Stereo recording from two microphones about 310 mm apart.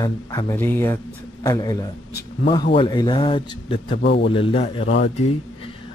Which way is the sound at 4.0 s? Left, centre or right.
Left.